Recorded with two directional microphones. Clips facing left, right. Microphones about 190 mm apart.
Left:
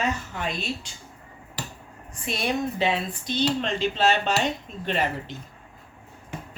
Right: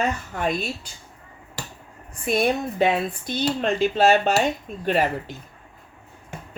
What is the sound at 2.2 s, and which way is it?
Speech, 50° right (ahead or behind).